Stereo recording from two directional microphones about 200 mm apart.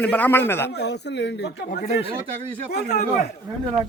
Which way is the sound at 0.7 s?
55° left (ahead or behind).